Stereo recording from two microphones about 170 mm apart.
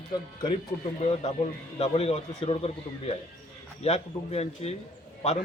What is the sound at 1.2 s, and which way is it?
A man's voice, 40° left (ahead or behind).